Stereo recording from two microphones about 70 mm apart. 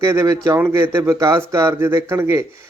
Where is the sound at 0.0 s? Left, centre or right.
Right.